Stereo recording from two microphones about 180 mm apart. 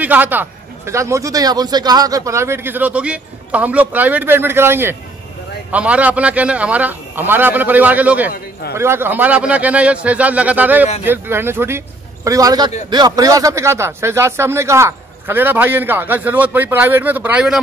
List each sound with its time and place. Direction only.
0.0 s a man's voice: 10° right (ahead or behind)